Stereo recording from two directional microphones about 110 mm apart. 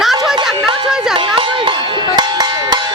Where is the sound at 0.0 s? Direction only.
Centre (ahead or behind).